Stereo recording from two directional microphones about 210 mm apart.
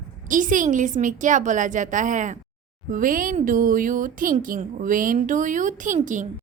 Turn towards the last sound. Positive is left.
turn(degrees=-35)  # may be behind; listen again after turning